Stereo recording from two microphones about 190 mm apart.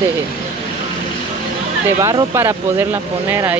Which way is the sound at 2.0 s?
15° right (ahead or behind).